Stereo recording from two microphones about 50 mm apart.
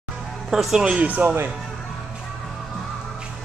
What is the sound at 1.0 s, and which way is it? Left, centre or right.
Speech, right.